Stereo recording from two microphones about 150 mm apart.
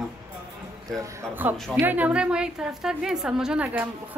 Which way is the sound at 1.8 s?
10° right (ahead or behind).